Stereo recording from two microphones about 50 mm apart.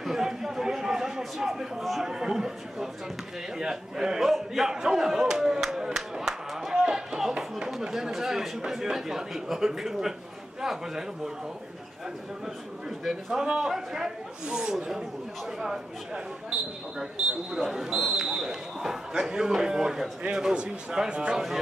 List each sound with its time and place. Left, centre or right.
0.0 s speech: centre
4.7 s a sound: centre
7.3 s speech: centre
13.1 s speech: centre
17.0 s speech: centre